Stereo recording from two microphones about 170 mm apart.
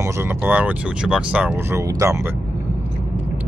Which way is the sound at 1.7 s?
20° right (ahead or behind).